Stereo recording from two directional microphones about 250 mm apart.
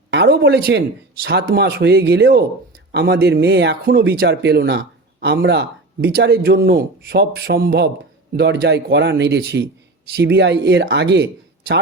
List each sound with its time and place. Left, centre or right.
0.1 s a man's voice: right